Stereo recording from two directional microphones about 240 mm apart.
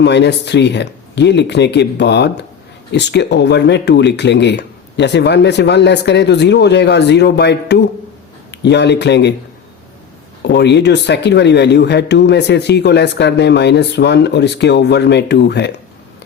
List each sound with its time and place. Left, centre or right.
0.0 s speech: left
10.4 s speech: left